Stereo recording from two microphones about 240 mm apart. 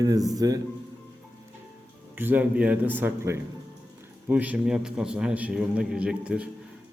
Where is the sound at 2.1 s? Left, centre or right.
Centre.